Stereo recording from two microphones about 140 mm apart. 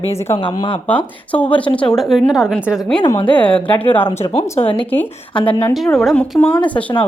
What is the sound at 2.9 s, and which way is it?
Speech, 30° left (ahead or behind).